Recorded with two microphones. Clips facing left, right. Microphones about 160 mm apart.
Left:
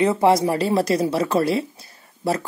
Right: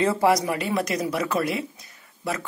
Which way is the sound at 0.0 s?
20° left (ahead or behind).